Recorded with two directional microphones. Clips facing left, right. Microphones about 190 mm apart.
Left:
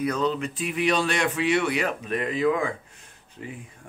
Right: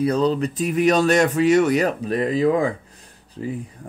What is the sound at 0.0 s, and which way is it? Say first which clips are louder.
Speech: right 6 dB; 35° right (ahead or behind).